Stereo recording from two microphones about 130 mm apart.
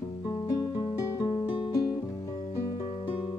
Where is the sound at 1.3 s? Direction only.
35° left (ahead or behind).